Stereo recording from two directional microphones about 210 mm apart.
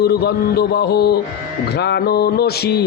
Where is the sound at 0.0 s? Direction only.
50° left (ahead or behind).